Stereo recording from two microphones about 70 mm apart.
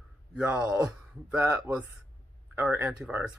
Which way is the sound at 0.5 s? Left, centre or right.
Centre.